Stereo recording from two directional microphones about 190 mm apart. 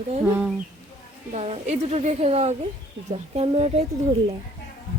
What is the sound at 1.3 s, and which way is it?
Speech, 35° right (ahead or behind).